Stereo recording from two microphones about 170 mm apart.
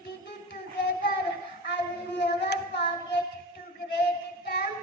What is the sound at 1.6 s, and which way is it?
Child singing, 90° left.